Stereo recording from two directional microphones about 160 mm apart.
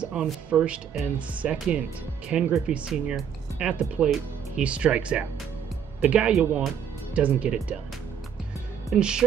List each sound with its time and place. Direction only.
0.0 s speech: 5° right (ahead or behind)
8.9 s speech: 5° right (ahead or behind)